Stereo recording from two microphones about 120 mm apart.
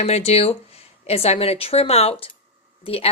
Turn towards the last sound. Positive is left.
turn(degrees=55)  # may be behind; listen again after turning